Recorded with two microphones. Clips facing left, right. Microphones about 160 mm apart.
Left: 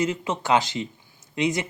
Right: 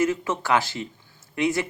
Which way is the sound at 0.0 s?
20° left (ahead or behind).